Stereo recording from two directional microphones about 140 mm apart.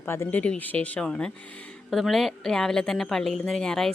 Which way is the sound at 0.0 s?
15° left (ahead or behind).